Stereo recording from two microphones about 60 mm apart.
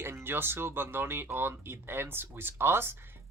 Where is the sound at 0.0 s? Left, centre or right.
Right.